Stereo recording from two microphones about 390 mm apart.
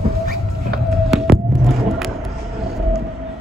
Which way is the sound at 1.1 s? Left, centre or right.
Centre.